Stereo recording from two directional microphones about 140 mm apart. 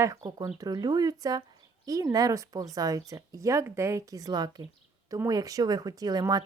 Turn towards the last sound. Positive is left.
turn(degrees=-25)  # may be behind; listen again after turning